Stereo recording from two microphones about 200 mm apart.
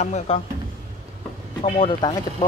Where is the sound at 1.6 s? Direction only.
30° left (ahead or behind).